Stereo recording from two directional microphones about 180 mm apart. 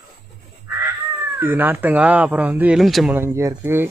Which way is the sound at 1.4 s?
10° right (ahead or behind).